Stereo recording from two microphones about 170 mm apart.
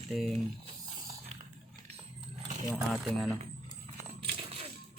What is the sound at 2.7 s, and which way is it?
Speech, centre (ahead or behind).